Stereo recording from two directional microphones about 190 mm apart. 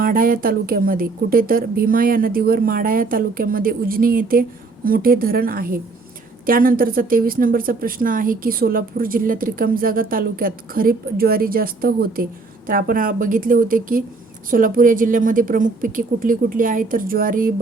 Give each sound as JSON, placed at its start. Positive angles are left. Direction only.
{"t": 0.0, "sound": "speech", "side_deg": -50}